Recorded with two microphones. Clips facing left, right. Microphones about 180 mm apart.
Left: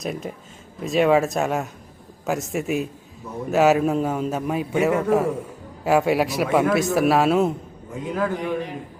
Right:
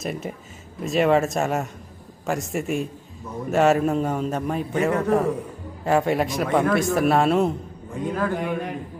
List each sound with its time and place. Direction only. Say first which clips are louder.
0.0 s a man's voice: even; centre (ahead or behind)